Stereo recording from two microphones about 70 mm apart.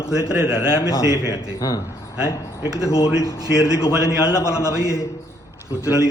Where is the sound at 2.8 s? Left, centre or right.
Left.